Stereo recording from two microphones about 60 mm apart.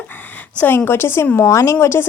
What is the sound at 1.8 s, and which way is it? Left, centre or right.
Speech, left.